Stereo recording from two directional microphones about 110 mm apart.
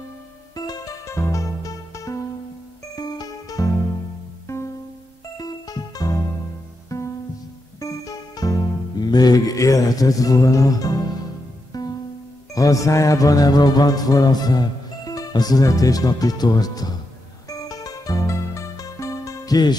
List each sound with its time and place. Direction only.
0.6 s music: 35° left (ahead or behind)